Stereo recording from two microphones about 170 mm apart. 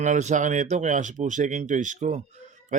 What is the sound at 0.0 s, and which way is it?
Speech, 45° right (ahead or behind).